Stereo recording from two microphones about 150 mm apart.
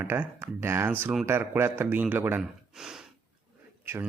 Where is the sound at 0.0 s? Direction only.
15° right (ahead or behind).